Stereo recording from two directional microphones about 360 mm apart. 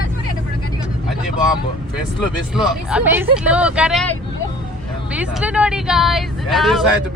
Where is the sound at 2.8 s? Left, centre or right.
Centre.